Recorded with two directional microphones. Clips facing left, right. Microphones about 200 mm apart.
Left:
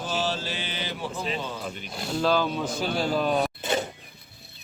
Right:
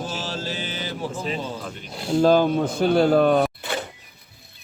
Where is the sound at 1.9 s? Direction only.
30° right (ahead or behind).